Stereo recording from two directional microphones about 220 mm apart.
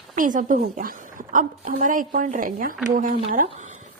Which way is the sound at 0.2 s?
35° right (ahead or behind).